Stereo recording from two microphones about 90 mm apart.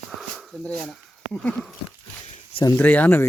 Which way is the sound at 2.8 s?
20° left (ahead or behind).